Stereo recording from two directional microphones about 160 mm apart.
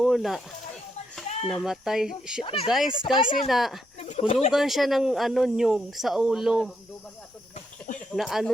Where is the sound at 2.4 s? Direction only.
35° left (ahead or behind).